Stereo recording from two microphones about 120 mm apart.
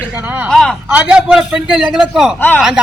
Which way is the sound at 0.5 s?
Centre (ahead or behind).